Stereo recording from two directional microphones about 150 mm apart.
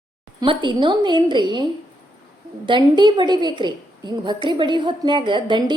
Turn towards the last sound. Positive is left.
turn(degrees=-30)  # may be behind; listen again after turning